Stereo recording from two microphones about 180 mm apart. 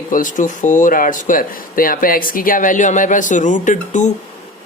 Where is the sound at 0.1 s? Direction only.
45° left (ahead or behind).